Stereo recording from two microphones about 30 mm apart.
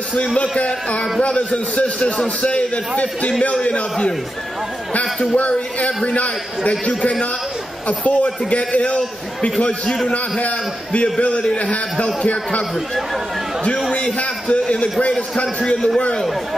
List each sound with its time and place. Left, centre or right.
0.4 s a man's voice: left
5.3 s a man's voice: left
6.9 s a man's voice: left
8.0 s a man's voice: left
14.1 s a man's voice: left